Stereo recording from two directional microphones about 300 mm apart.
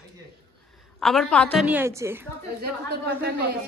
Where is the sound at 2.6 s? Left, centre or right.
Right.